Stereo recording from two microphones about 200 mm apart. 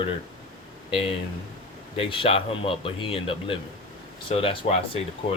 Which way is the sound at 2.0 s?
25° left (ahead or behind).